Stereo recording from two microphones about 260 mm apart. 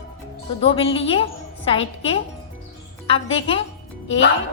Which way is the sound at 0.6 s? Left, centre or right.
Left.